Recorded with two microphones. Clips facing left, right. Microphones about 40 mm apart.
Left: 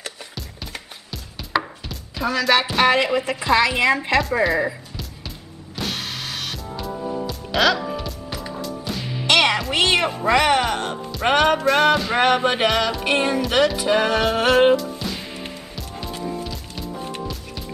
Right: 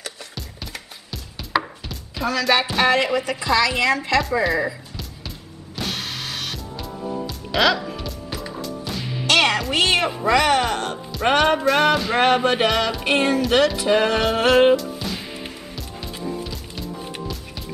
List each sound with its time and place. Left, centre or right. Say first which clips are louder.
1.1 s chopping: even; centre
2.5 s music: left 2 dB; centre
2.9 s a woman's voice: left 1 dB; centre
4.3 s music: left 1 dB; centre
5.8 s music: even; centre
9.2 s music: even; left
9.8 s speech: left 2 dB; centre
11.1 s music: even; centre
16.3 s music: even; centre